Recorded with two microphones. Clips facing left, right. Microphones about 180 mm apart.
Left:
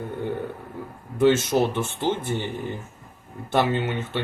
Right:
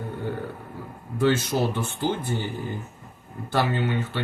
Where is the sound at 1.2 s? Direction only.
25° left (ahead or behind).